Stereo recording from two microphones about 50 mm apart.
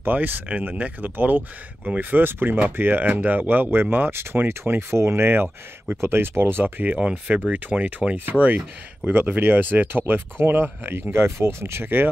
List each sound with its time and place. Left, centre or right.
0.0 s speech: right
5.9 s speech: right
7.0 s speech: right